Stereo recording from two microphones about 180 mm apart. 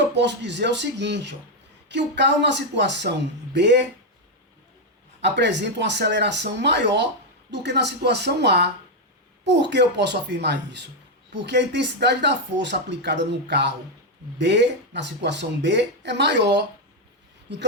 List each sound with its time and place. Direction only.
0.1 s speech: 75° right (ahead or behind)
5.2 s speech: 75° right (ahead or behind)